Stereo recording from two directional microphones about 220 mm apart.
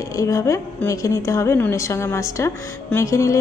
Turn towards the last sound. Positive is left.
turn(degrees=15)  # may be behind; listen again after turning